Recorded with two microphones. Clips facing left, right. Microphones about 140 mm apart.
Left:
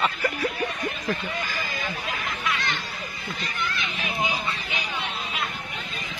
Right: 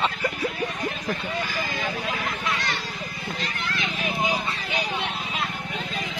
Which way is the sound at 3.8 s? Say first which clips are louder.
Right 4 dB; 40° right (ahead or behind).